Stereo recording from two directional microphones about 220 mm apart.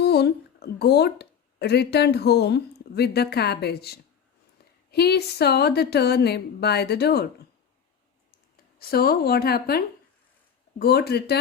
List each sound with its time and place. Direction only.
0.0 s speech: 50° left (ahead or behind)
8.8 s speech: 45° left (ahead or behind)